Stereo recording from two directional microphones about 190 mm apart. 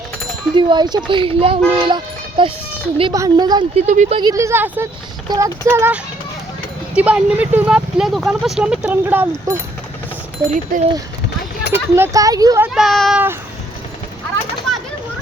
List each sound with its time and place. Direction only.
0.5 s speech: 25° right (ahead or behind)
3.8 s speech: 40° right (ahead or behind)
4.2 s speech: 20° right (ahead or behind)
10.7 s speech: 45° right (ahead or behind)
11.7 s speech: 10° right (ahead or behind)
12.6 s speech: centre (ahead or behind)